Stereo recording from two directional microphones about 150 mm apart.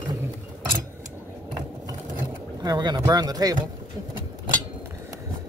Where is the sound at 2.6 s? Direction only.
30° right (ahead or behind).